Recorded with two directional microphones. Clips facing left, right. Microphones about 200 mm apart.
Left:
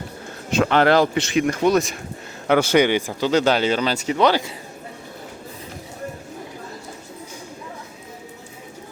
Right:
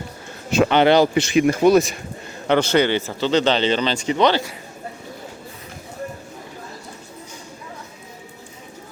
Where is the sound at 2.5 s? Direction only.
10° left (ahead or behind).